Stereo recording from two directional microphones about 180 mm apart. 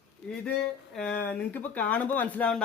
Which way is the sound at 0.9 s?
5° left (ahead or behind).